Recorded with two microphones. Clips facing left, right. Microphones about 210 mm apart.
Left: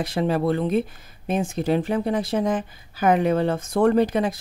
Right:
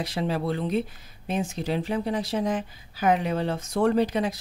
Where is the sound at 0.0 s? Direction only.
50° left (ahead or behind).